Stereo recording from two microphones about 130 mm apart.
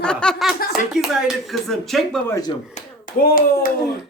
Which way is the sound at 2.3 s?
30° left (ahead or behind).